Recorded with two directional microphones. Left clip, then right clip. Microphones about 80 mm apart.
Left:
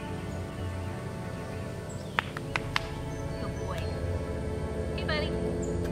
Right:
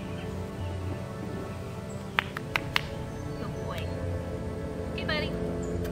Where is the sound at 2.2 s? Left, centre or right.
Centre.